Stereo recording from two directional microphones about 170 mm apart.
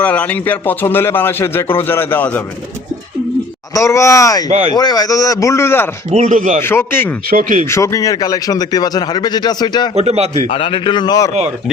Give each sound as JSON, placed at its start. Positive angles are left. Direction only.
{"t": 0.0, "sound": "a man's voice", "side_deg": 10}
{"t": 3.8, "sound": "speech", "side_deg": 15}
{"t": 4.4, "sound": "a man's voice", "side_deg": -35}
{"t": 4.7, "sound": "speech", "side_deg": 25}
{"t": 6.1, "sound": "speech", "side_deg": -45}
{"t": 6.6, "sound": "a man's voice", "side_deg": 15}
{"t": 7.3, "sound": "speech", "side_deg": -55}
{"t": 7.7, "sound": "speech", "side_deg": 15}
{"t": 9.9, "sound": "a man's voice", "side_deg": -40}
{"t": 10.4, "sound": "speech", "side_deg": 30}